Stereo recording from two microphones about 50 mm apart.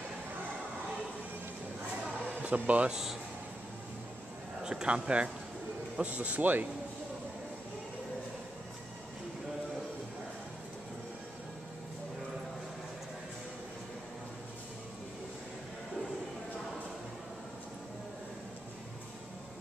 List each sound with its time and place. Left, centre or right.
2.4 s speech: right
2.9 s speech: centre
4.6 s a man's voice: centre; by 6.7 s right